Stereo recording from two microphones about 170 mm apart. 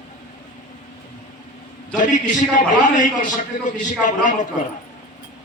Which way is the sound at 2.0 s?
50° left (ahead or behind).